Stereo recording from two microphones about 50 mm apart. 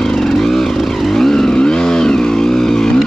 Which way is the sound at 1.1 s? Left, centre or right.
Centre.